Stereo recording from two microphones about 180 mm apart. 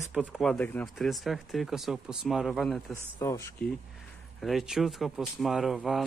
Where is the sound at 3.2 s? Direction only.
15° left (ahead or behind).